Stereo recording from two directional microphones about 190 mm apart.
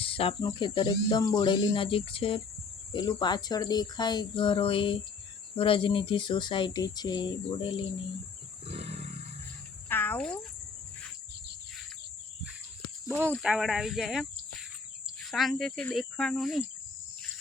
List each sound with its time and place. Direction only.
0.0 s speech: 30° left (ahead or behind)
8.6 s roaring cats: 30° right (ahead or behind)
9.9 s speech: 10° left (ahead or behind)
13.1 s speech: 10° right (ahead or behind)
15.3 s speech: centre (ahead or behind)